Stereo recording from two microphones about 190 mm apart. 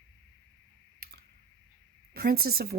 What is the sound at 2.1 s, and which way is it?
Speech, 55° right (ahead or behind).